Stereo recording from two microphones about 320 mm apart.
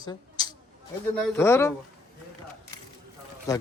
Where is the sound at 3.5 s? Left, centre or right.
Centre.